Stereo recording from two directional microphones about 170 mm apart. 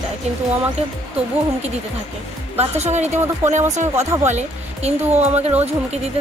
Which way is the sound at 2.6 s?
40° right (ahead or behind).